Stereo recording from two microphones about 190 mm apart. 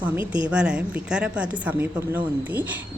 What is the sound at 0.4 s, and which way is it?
A woman's voice, 5° right (ahead or behind).